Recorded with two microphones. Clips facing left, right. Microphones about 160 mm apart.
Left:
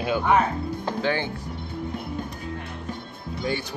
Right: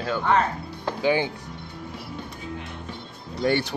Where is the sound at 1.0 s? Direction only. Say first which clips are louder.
Right 4 dB; 10° right (ahead or behind).